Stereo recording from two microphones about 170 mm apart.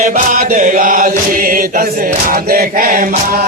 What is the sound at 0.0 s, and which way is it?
Chant, 50° right (ahead or behind).